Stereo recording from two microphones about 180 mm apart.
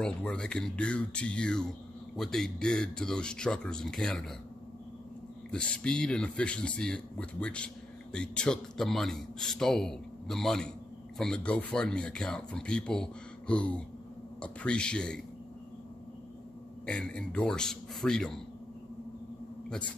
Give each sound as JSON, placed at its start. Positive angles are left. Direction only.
{"t": 0.0, "sound": "speech", "side_deg": 5}
{"t": 5.5, "sound": "speech", "side_deg": 5}
{"t": 16.8, "sound": "speech", "side_deg": 5}